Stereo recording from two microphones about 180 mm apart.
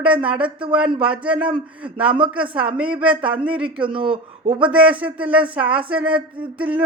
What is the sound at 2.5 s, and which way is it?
Speech, 5° right (ahead or behind).